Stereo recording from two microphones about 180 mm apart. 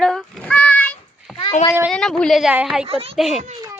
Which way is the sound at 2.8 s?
35° right (ahead or behind).